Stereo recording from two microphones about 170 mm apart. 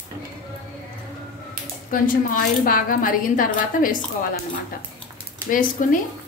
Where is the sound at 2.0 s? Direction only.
55° left (ahead or behind).